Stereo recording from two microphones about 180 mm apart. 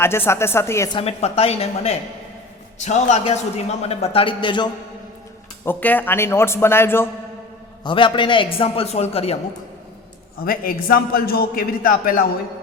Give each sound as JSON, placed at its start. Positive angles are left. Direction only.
{"t": 0.0, "sound": "a man's voice", "side_deg": 15}
{"t": 0.9, "sound": "a man's voice", "side_deg": 35}
{"t": 5.6, "sound": "a man's voice", "side_deg": 10}
{"t": 7.9, "sound": "a man's voice", "side_deg": 25}
{"t": 10.4, "sound": "a man's voice", "side_deg": 55}